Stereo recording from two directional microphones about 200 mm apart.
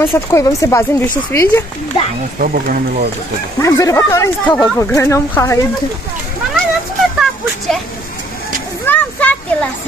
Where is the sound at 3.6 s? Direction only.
15° left (ahead or behind).